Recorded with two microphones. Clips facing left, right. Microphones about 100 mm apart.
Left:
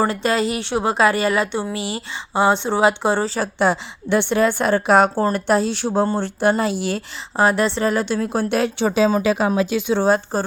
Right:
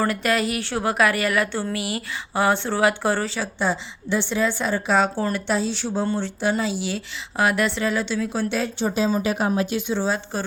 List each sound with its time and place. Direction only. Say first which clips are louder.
0.0 s speech: left 3 dB; 25° left (ahead or behind)
3.4 s a woman's voice: left 5 dB; 65° left (ahead or behind)
7.3 s a woman's voice: left 4 dB; 30° left (ahead or behind)
7.9 s a woman's voice: left 4 dB; 50° left (ahead or behind); by 10.1 s 80° left
10.3 s a woman's voice: left 5 dB; 40° left (ahead or behind)